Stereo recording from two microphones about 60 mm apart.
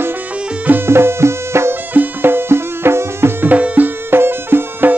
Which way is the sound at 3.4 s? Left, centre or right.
Right.